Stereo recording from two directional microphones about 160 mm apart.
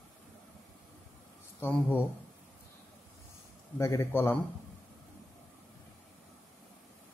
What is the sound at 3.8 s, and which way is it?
Speech, 15° left (ahead or behind).